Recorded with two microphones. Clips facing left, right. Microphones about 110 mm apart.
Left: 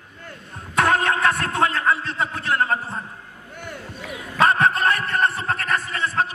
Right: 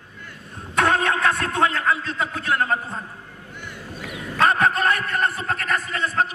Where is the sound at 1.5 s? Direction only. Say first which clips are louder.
Even; 30° left (ahead or behind).